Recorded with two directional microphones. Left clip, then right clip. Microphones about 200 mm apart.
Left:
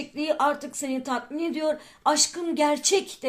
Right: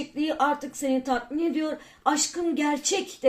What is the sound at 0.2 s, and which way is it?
Speech, 40° left (ahead or behind).